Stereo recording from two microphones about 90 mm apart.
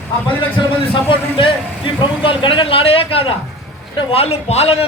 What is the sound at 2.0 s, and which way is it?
A man's voice, 70° left (ahead or behind).